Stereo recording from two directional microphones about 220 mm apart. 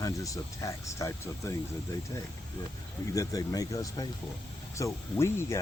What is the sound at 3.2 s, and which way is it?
Speech, 15° left (ahead or behind).